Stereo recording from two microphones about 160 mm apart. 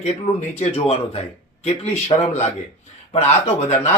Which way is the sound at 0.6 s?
40° left (ahead or behind).